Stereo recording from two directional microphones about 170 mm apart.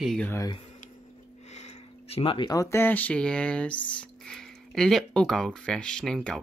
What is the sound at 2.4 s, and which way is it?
Speech, 20° left (ahead or behind).